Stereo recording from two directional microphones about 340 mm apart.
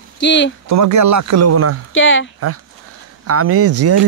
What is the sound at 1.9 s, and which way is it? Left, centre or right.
Speech, left.